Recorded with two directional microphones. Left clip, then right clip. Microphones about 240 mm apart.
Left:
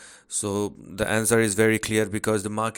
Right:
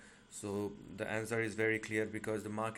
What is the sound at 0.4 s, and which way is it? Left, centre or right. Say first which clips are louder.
Speech: left 12 dB; left.